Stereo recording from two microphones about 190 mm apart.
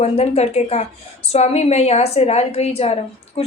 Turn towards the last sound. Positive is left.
turn(degrees=30)  # may be behind; listen again after turning